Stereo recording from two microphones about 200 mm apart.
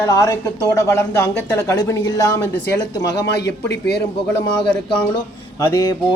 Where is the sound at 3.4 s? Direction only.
60° left (ahead or behind).